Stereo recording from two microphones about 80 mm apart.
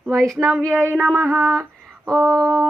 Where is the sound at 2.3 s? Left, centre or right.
Centre.